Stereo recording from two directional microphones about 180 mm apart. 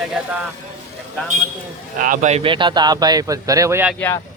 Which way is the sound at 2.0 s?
45° right (ahead or behind).